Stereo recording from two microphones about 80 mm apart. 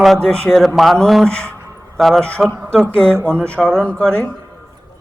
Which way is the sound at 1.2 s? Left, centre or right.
Centre.